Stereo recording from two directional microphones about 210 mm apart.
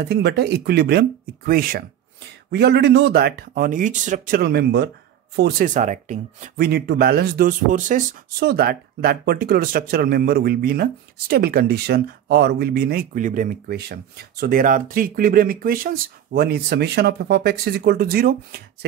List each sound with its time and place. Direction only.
0.0 s speech: 50° right (ahead or behind)